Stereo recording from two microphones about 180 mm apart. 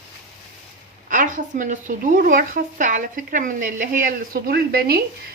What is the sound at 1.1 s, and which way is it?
Speech, 45° right (ahead or behind).